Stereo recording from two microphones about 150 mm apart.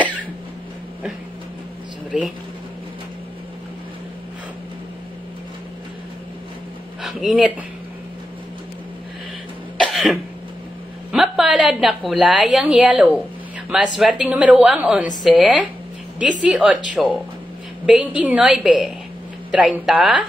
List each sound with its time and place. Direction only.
2.1 s a woman's voice: 5° right (ahead or behind)
7.0 s speech: centre (ahead or behind)
9.8 s cough: centre (ahead or behind)
11.1 s a woman's voice: 5° right (ahead or behind)